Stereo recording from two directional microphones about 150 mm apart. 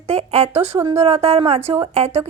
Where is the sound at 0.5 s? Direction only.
15° right (ahead or behind).